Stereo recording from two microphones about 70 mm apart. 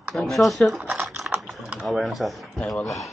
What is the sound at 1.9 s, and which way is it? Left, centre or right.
Speech, centre.